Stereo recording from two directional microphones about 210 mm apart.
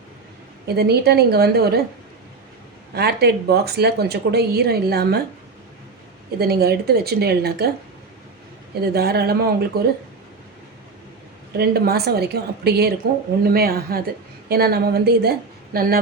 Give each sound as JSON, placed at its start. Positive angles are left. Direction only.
{"t": 0.8, "sound": "speech", "side_deg": -50}
{"t": 2.9, "sound": "speech", "side_deg": -50}
{"t": 6.4, "sound": "speech", "side_deg": -50}
{"t": 8.8, "sound": "speech", "side_deg": -50}
{"t": 11.5, "sound": "speech", "side_deg": -50}